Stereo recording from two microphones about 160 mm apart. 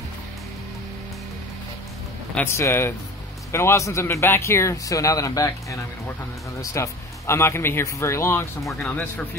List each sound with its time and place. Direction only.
2.3 s speech: 15° left (ahead or behind)
8.6 s speech: centre (ahead or behind)